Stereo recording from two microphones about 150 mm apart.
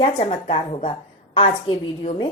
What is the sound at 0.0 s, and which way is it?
A woman's voice, 45° left (ahead or behind).